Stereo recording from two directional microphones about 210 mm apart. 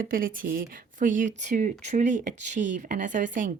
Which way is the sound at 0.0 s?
40° right (ahead or behind).